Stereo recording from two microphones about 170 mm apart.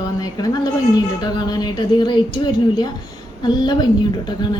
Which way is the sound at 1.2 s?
25° left (ahead or behind).